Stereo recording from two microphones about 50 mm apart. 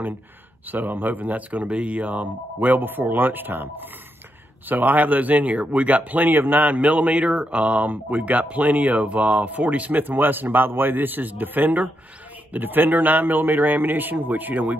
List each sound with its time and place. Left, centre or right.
0.7 s speech: right